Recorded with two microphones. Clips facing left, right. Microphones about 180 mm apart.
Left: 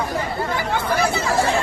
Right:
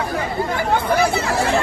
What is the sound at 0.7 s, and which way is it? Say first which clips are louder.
Chatter: right 4 dB; 60° right (ahead or behind).